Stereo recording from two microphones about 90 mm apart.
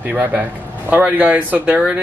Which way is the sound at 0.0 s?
20° right (ahead or behind).